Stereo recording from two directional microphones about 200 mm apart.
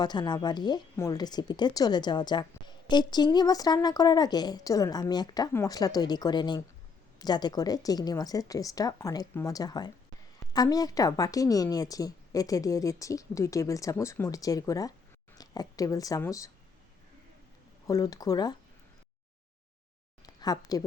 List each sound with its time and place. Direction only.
0.0 s a woman's voice: 20° left (ahead or behind)
17.8 s a woman's voice: 15° left (ahead or behind)
20.2 s speech: 20° left (ahead or behind)